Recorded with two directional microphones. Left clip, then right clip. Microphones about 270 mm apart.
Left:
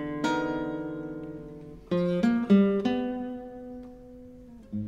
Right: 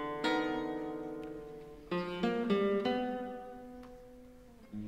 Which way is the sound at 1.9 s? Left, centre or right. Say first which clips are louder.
Left 8 dB; left.